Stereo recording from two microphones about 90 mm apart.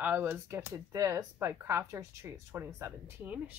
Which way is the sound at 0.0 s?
20° right (ahead or behind).